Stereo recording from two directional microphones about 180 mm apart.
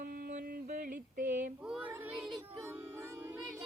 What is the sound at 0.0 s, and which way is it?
Mantra, 50° right (ahead or behind).